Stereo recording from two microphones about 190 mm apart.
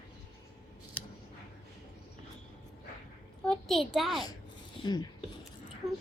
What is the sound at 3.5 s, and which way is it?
Speech, centre (ahead or behind).